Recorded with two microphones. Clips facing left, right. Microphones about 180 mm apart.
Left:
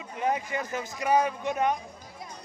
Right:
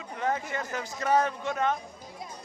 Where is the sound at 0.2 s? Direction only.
15° left (ahead or behind).